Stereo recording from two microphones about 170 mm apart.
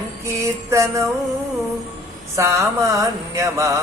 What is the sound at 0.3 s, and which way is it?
Music, 15° right (ahead or behind).